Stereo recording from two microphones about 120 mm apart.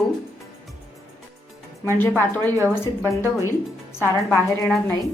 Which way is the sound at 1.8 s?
20° left (ahead or behind).